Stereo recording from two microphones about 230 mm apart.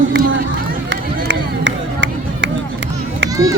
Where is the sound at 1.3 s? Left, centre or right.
Right.